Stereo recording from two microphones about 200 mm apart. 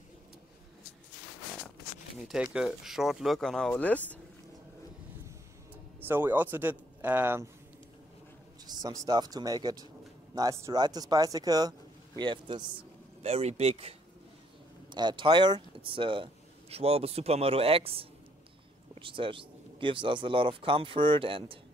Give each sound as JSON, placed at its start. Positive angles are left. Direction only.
{"t": 2.1, "sound": "speech", "side_deg": -5}
{"t": 5.9, "sound": "speech", "side_deg": -10}
{"t": 8.6, "sound": "speech", "side_deg": -20}